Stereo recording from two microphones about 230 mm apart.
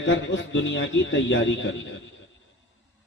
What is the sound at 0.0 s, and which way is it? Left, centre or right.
A man's voice, left.